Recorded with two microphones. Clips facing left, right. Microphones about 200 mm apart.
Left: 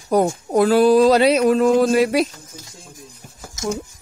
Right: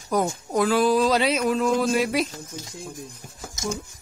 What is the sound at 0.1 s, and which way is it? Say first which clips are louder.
Speech: left 6 dB; 35° left (ahead or behind).